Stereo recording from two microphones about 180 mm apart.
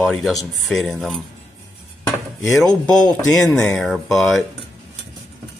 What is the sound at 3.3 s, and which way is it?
Speech, 15° left (ahead or behind).